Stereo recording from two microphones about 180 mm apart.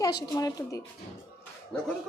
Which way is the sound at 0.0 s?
20° left (ahead or behind).